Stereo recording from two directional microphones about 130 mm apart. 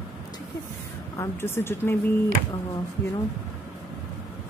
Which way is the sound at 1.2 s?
20° left (ahead or behind).